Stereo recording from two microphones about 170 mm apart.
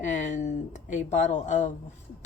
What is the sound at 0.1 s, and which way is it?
A woman's voice, 45° left (ahead or behind).